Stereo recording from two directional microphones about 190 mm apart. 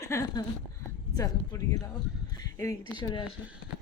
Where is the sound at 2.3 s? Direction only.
15° left (ahead or behind).